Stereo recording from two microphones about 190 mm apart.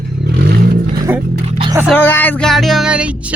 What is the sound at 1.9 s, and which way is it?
Music, 10° left (ahead or behind).